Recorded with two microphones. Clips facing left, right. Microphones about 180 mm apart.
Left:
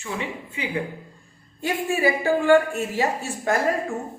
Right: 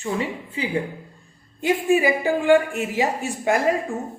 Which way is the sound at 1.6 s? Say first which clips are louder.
Right 4 dB; 15° right (ahead or behind).